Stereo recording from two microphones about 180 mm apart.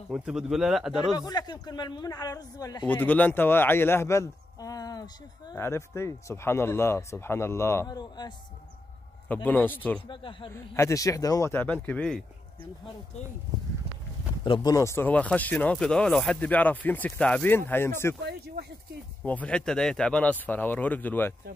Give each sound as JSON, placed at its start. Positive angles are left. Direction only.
{"t": 0.1, "sound": "speech", "side_deg": -5}
{"t": 1.1, "sound": "speech", "side_deg": 25}
{"t": 2.9, "sound": "speech", "side_deg": 10}
{"t": 9.3, "sound": "speech", "side_deg": 10}
{"t": 10.0, "sound": "speech", "side_deg": 30}
{"t": 10.5, "sound": "speech", "side_deg": 15}
{"t": 14.4, "sound": "speech", "side_deg": 25}
{"t": 18.2, "sound": "speech", "side_deg": -60}
{"t": 19.2, "sound": "speech", "side_deg": 5}